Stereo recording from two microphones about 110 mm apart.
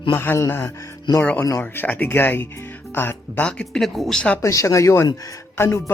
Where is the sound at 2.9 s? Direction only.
20° left (ahead or behind).